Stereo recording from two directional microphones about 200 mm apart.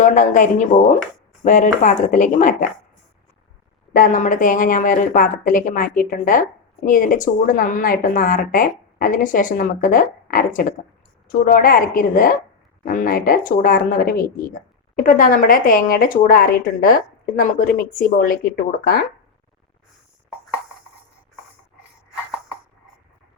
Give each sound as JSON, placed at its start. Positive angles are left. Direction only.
{"t": 0.0, "sound": "a woman's voice", "side_deg": 40}
{"t": 3.9, "sound": "a woman's voice", "side_deg": 40}